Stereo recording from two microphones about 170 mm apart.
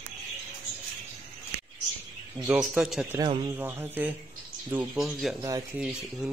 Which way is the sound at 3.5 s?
10° right (ahead or behind).